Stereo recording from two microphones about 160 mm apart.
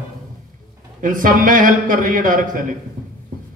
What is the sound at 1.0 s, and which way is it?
A man's voice, 60° right (ahead or behind).